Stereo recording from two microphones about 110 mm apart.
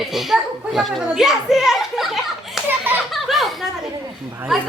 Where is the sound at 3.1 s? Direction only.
Centre (ahead or behind).